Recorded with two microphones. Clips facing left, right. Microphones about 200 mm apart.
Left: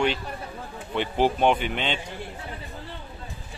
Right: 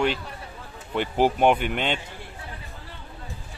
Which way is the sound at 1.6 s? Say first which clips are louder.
Right 2 dB; 50° right (ahead or behind).